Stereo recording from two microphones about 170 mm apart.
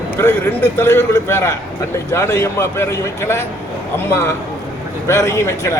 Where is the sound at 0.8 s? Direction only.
15° left (ahead or behind).